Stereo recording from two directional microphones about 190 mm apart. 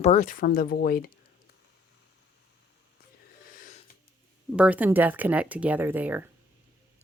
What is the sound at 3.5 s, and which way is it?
Snort, 45° left (ahead or behind).